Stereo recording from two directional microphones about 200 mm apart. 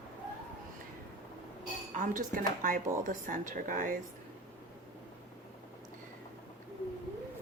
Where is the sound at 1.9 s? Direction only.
40° right (ahead or behind).